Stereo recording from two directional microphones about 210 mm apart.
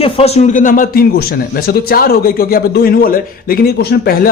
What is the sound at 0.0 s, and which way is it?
Speech, 30° left (ahead or behind).